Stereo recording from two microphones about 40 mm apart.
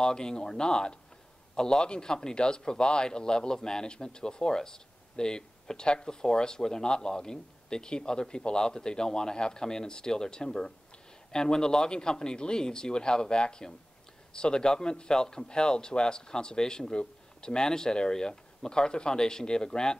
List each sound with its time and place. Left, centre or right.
0.0 s a man's voice: centre